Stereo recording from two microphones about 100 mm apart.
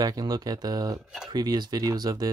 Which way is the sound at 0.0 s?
40° right (ahead or behind).